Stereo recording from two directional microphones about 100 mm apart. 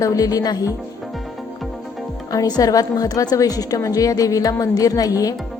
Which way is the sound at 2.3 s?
40° left (ahead or behind).